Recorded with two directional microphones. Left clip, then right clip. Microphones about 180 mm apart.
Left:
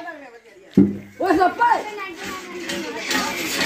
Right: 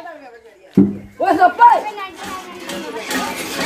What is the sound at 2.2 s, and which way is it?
Music, 65° right (ahead or behind).